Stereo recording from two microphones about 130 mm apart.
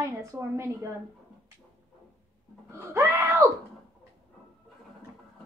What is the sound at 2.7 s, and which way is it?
Speech, 20° right (ahead or behind).